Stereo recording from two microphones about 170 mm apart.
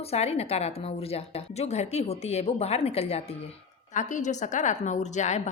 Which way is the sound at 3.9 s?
45° left (ahead or behind).